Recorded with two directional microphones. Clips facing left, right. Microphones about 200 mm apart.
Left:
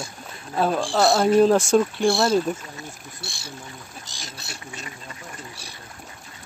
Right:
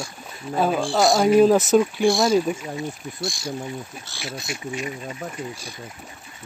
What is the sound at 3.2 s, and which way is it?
Speech, 60° left (ahead or behind).